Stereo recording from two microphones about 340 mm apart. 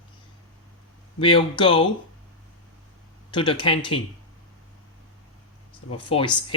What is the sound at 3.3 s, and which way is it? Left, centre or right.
Speech, centre.